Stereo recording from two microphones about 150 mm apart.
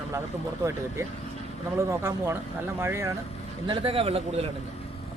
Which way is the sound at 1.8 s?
15° right (ahead or behind).